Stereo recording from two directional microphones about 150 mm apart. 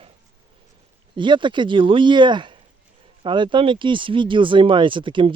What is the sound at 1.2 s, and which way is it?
Speech, 30° right (ahead or behind).